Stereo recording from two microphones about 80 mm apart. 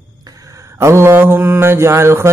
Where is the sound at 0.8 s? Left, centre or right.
Right.